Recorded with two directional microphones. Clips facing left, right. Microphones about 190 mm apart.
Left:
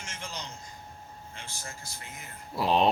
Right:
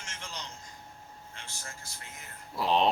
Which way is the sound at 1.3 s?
10° left (ahead or behind).